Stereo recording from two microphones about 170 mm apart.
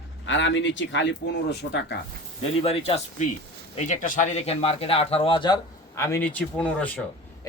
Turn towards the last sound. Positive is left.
turn(degrees=10)  # may be behind; listen again after turning